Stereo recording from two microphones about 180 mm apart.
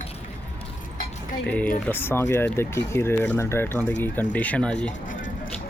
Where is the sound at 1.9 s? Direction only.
10° left (ahead or behind).